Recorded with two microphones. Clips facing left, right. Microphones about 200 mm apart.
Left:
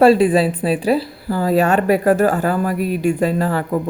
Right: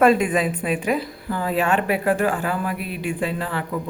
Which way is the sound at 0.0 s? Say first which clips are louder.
Left 6 dB; 30° left (ahead or behind).